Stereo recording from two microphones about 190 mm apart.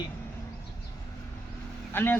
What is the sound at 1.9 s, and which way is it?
Speech, 10° left (ahead or behind).